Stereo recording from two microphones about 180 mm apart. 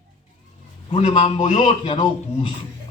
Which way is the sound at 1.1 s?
25° left (ahead or behind).